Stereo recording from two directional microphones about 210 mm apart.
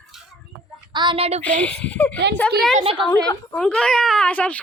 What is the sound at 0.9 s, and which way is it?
Speech, 25° right (ahead or behind).